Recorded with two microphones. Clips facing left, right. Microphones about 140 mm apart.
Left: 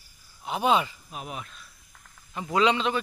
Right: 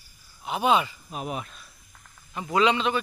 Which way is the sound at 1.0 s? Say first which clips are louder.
Right 5 dB; 45° right (ahead or behind).